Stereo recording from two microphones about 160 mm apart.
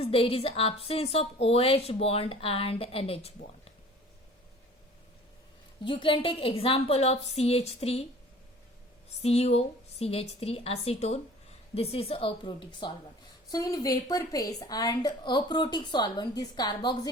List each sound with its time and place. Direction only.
0.0 s a woman's voice: 35° left (ahead or behind)
5.8 s a woman's voice: 30° left (ahead or behind)
9.2 s a woman's voice: 40° left (ahead or behind)